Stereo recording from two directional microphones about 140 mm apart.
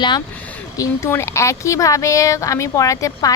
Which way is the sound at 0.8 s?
20° left (ahead or behind).